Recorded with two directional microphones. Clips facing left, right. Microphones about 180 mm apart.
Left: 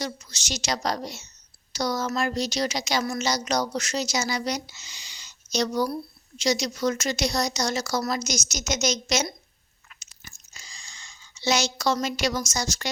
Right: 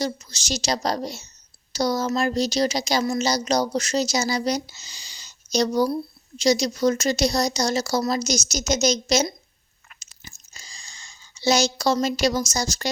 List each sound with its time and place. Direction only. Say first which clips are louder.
0.0 s speech: right 5 dB; 30° right (ahead or behind)
10.0 s chewing: right 4 dB; 35° right (ahead or behind)